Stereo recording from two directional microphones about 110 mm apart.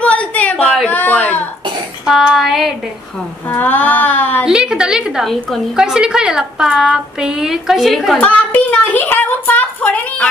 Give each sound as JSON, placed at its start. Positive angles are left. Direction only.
{"t": 0.0, "sound": "a sound", "side_deg": 10}
{"t": 0.8, "sound": "a woman's voice", "side_deg": 15}
{"t": 2.0, "sound": "a woman's voice", "side_deg": -5}
{"t": 3.4, "sound": "a woman's voice", "side_deg": 15}
{"t": 4.5, "sound": "a woman's voice", "side_deg": -5}
{"t": 8.2, "sound": "a woman's voice", "side_deg": 10}